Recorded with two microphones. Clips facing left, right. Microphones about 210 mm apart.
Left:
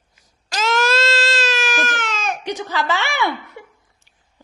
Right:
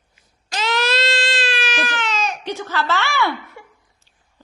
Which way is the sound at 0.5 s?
45° left (ahead or behind).